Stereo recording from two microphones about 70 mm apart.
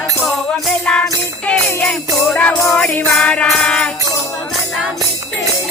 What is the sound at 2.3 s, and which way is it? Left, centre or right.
Music, centre.